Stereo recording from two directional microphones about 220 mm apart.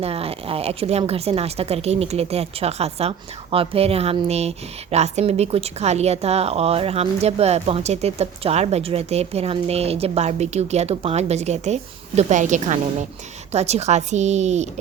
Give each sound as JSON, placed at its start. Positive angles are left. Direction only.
{"t": 0.0, "sound": "a woman's voice", "side_deg": -25}